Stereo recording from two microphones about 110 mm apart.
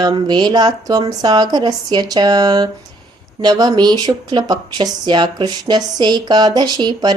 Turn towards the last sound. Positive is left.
turn(degrees=-40)  # may be behind; listen again after turning